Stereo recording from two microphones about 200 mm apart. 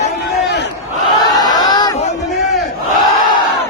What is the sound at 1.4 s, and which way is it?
Crowd, 20° left (ahead or behind).